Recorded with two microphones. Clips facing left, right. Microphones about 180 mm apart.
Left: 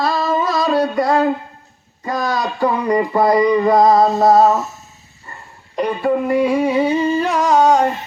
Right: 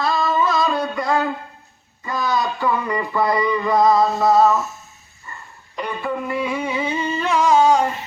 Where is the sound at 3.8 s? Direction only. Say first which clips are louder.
Left 1 dB; 25° left (ahead or behind).